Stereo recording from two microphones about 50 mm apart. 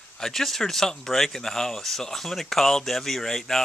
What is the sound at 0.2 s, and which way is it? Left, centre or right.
Speech, centre.